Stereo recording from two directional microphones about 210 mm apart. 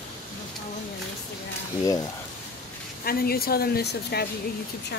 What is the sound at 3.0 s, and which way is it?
A woman's voice, 45° left (ahead or behind).